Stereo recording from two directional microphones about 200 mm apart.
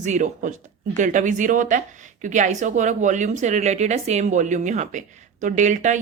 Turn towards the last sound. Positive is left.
turn(degrees=-40)  # may be behind; listen again after turning